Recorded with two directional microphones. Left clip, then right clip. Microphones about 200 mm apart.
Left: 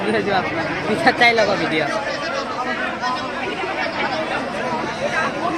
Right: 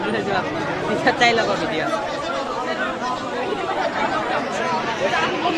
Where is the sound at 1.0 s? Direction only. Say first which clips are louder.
Left 3 dB; 50° left (ahead or behind).